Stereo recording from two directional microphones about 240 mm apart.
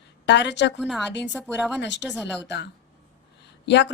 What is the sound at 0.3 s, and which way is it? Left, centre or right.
Speech, left.